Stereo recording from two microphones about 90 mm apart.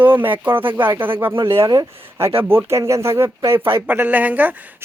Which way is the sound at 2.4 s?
30° right (ahead or behind).